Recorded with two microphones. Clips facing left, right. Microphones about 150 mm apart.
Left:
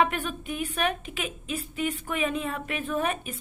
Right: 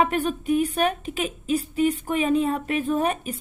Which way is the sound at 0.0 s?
35° right (ahead or behind).